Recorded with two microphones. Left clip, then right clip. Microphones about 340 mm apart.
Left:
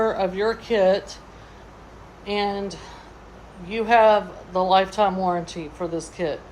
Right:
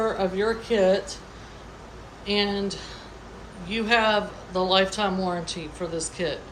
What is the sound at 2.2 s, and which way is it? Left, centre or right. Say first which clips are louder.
A woman's voice: left 1 dB; centre.